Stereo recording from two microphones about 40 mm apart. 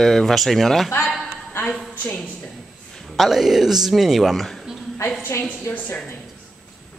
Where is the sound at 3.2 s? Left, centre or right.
Centre.